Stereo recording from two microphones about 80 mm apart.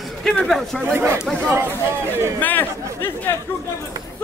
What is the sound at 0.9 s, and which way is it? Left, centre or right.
Speech, right.